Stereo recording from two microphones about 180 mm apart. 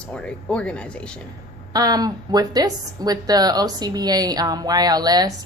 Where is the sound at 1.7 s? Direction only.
20° right (ahead or behind).